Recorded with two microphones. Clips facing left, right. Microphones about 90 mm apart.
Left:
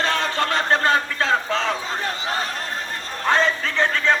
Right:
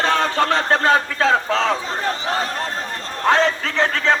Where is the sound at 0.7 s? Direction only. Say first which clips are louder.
Right 3 dB; 90° right.